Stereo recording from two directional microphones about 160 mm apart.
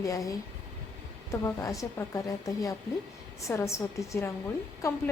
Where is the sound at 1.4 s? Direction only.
20° left (ahead or behind).